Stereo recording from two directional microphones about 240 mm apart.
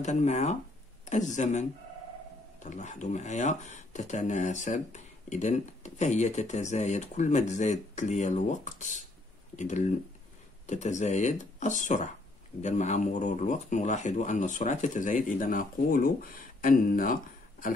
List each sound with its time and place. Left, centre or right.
0.0 s speech: left